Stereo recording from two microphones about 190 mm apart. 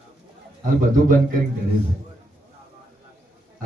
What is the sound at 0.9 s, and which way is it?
Speech, 45° right (ahead or behind).